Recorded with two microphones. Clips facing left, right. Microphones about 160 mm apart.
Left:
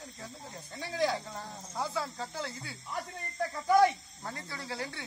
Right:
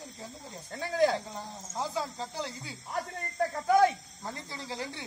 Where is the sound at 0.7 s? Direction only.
50° right (ahead or behind).